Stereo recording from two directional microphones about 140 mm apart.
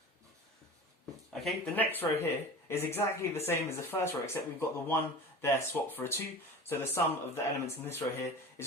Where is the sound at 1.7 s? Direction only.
15° left (ahead or behind).